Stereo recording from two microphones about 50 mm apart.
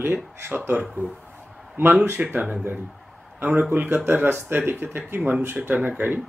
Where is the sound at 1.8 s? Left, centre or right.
Right.